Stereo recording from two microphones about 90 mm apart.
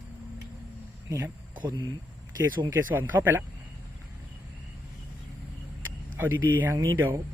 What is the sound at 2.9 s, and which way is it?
Speech, 20° right (ahead or behind).